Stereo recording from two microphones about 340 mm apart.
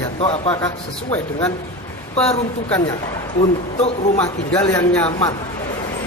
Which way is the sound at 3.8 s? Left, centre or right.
Centre.